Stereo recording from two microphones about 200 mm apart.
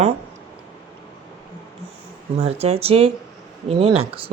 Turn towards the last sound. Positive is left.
turn(degrees=-30)  # may be behind; listen again after turning